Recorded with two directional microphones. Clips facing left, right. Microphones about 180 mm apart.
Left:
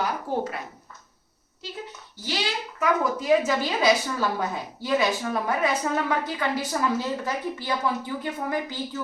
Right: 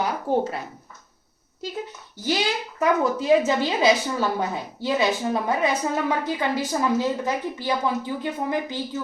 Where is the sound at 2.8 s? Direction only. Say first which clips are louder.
Right 3 dB; 25° right (ahead or behind).